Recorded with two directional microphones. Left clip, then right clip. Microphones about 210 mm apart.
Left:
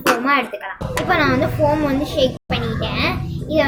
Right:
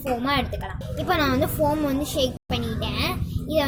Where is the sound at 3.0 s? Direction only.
55° right (ahead or behind).